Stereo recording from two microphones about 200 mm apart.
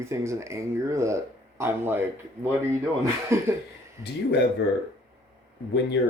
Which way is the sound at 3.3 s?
15° right (ahead or behind).